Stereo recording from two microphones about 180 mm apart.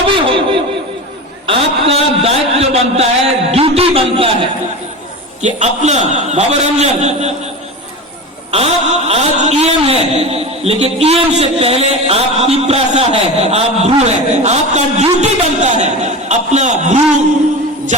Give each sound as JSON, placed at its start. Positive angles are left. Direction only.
{"t": 0.1, "sound": "laughter", "side_deg": -30}
{"t": 1.5, "sound": "a man's voice", "side_deg": -30}
{"t": 8.5, "sound": "a man's voice", "side_deg": -35}